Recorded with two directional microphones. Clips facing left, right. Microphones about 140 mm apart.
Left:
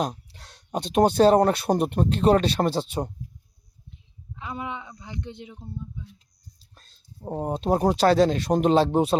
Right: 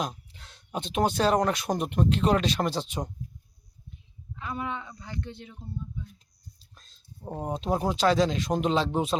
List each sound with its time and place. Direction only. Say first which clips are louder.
0.0 s speech: left 5 dB; 35° left (ahead or behind)
4.4 s speech: even; 20° left (ahead or behind)
6.7 s a sound: left 2 dB; 30° left (ahead or behind)
7.6 s speech: left 5 dB; 45° left (ahead or behind)